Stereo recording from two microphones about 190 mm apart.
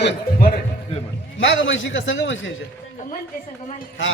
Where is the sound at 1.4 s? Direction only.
80° left.